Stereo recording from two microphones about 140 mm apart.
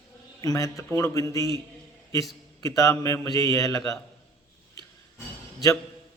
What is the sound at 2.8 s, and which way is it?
Speech, 20° left (ahead or behind).